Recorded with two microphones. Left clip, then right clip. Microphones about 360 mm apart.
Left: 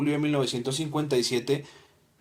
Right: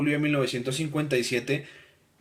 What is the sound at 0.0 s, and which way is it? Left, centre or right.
Speech, centre.